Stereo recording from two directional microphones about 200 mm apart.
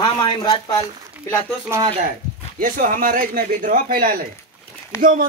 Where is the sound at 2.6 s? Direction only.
45° right (ahead or behind).